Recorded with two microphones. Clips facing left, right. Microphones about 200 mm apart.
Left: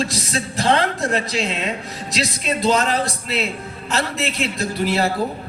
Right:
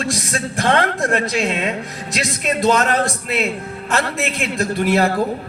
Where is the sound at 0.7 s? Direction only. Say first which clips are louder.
Right 1 dB; 50° right (ahead or behind).